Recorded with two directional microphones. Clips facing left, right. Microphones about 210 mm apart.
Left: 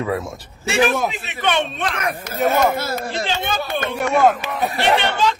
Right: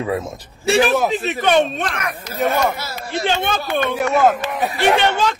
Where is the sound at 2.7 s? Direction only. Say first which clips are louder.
Left 6 dB; 50° left (ahead or behind).